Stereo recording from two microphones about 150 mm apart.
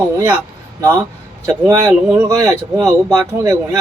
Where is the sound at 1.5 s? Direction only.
20° right (ahead or behind).